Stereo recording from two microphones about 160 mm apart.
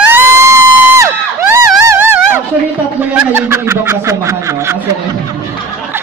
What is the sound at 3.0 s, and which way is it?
Speech, 15° right (ahead or behind).